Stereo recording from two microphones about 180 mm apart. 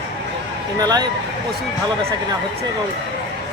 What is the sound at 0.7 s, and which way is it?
Speech, 20° right (ahead or behind).